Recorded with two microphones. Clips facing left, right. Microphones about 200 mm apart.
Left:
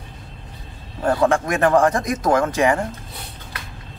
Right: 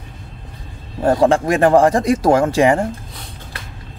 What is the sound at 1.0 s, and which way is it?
Speech, 30° right (ahead or behind).